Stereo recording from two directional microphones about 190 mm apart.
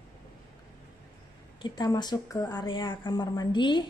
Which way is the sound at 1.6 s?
20° left (ahead or behind).